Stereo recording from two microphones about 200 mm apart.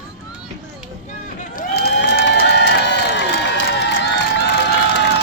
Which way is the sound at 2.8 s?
60° left (ahead or behind).